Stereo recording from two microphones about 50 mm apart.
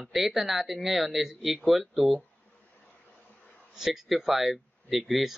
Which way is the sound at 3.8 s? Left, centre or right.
Centre.